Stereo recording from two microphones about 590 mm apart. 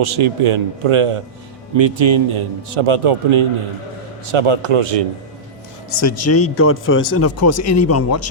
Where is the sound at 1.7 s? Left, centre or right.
Right.